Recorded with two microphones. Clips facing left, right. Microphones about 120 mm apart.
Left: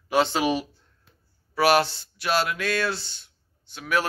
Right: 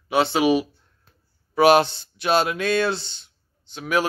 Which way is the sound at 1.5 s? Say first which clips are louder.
Right 5 dB; 20° right (ahead or behind).